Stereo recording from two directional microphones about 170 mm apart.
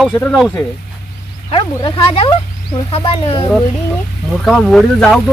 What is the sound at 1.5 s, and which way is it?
Speech, 30° left (ahead or behind).